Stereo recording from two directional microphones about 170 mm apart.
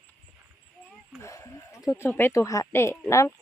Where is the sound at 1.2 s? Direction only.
20° left (ahead or behind).